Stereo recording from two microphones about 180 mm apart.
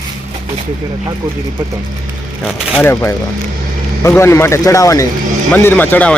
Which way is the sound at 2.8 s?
15° left (ahead or behind).